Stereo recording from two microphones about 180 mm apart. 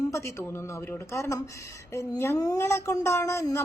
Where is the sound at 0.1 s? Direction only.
15° left (ahead or behind).